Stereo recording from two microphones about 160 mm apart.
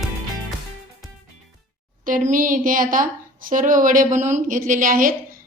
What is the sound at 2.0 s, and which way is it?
A woman's voice, 55° right (ahead or behind).